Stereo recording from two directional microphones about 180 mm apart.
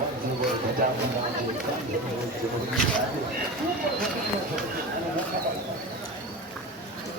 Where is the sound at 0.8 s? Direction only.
50° right (ahead or behind).